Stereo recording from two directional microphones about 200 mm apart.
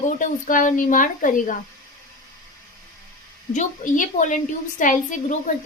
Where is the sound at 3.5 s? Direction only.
40° left (ahead or behind).